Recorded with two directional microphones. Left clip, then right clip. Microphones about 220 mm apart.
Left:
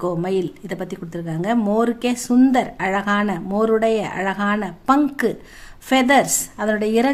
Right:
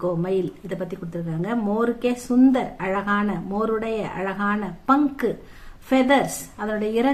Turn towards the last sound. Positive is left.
turn(degrees=40)  # may be behind; listen again after turning